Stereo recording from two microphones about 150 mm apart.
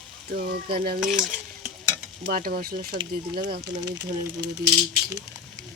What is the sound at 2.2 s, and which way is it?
Speech, 80° right.